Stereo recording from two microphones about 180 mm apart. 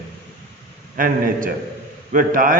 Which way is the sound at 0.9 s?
50° right (ahead or behind).